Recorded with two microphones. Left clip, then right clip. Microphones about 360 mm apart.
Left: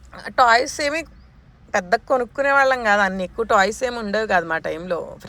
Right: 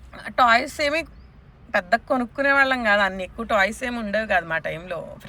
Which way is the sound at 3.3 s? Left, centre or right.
Centre.